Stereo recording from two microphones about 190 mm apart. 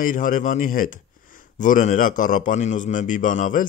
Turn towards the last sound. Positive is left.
turn(degrees=45)  # may be behind; listen again after turning